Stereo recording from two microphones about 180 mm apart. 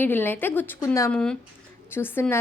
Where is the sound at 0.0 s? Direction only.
10° left (ahead or behind).